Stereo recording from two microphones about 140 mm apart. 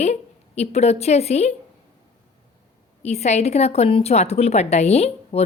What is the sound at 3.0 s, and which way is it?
A woman's voice, 50° left (ahead or behind).